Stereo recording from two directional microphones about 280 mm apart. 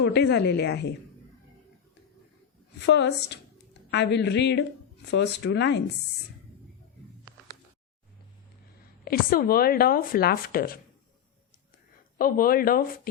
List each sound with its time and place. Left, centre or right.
0.0 s speech: left
2.8 s speech: left
9.0 s speech: left
12.1 s speech: left